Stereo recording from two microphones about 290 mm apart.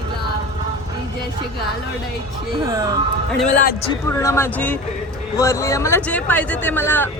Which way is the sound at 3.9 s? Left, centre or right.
Centre.